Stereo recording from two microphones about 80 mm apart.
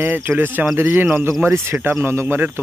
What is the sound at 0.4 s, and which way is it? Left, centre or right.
Speech, right.